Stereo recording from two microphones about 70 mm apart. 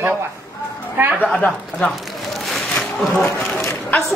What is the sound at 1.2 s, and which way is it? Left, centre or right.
Speech, centre.